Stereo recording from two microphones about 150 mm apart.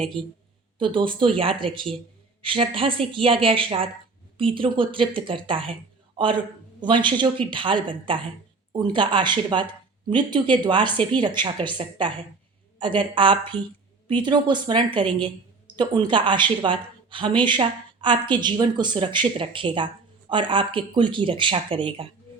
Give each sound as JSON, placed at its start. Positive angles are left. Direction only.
{"t": 0.8, "sound": "speech", "side_deg": -35}
{"t": 6.7, "sound": "speech", "side_deg": -30}